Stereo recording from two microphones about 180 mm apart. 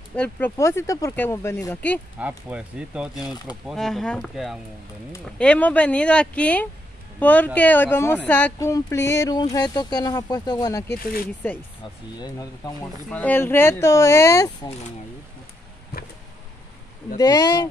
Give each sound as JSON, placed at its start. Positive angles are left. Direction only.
{"t": 0.1, "sound": "speech", "side_deg": 10}
{"t": 2.1, "sound": "speech", "side_deg": -10}
{"t": 12.2, "sound": "speech", "side_deg": 20}
{"t": 12.8, "sound": "speech", "side_deg": 10}
{"t": 15.9, "sound": "a sound", "side_deg": 60}
{"t": 17.2, "sound": "speech", "side_deg": 20}